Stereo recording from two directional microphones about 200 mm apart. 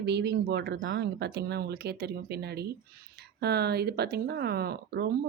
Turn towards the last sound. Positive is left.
turn(degrees=-55)  # may be behind; listen again after turning